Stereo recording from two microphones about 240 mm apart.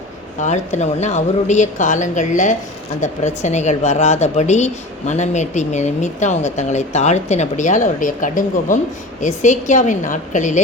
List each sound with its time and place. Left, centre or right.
0.4 s a woman's voice: left